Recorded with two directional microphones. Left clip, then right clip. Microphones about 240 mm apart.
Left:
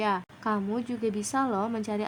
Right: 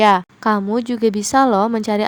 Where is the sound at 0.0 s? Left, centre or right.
Right.